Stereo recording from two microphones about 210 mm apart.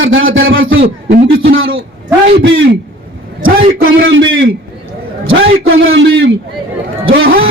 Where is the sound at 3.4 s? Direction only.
40° right (ahead or behind).